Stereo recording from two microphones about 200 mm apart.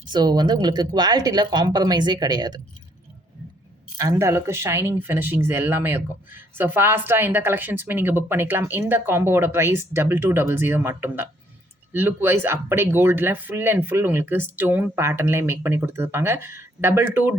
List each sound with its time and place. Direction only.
0.1 s speech: 20° right (ahead or behind)
3.9 s speech: 15° right (ahead or behind)